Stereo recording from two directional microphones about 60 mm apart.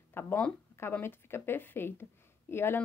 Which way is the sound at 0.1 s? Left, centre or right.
Left.